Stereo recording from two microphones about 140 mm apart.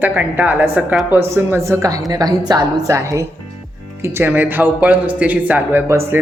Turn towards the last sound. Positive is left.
turn(degrees=-15)  # may be behind; listen again after turning